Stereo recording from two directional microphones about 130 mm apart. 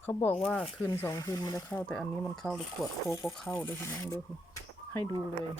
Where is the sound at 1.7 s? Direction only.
10° left (ahead or behind).